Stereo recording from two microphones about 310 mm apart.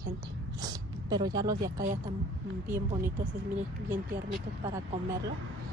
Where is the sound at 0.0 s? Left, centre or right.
Centre.